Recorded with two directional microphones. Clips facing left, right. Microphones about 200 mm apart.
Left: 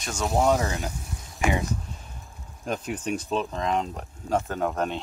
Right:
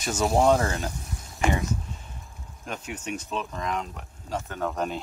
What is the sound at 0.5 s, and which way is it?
Speech, 15° left (ahead or behind).